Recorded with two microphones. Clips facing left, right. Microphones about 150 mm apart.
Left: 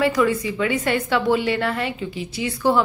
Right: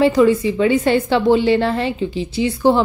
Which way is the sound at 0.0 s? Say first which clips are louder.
Right 6 dB; 25° right (ahead or behind).